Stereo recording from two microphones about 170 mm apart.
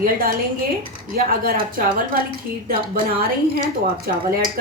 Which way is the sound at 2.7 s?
60° right (ahead or behind).